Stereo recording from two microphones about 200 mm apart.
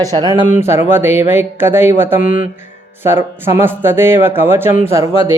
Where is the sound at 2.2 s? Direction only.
45° left (ahead or behind).